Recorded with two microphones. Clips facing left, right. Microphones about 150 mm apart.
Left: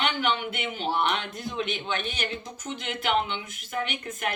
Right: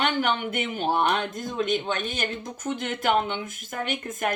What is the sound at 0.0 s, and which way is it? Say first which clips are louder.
A man's voice: right 2 dB; 45° right (ahead or behind).